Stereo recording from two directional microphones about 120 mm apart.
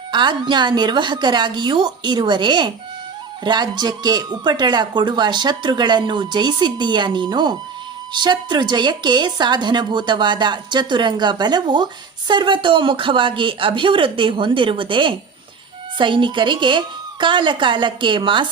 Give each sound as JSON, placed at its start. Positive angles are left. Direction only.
{"t": 0.1, "sound": "speech", "side_deg": -40}